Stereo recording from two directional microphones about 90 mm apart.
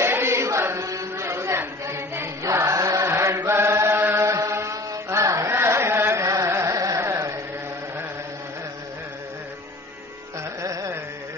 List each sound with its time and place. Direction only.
0.0 s chant: 30° right (ahead or behind)
10.6 s carnatic music: 35° right (ahead or behind)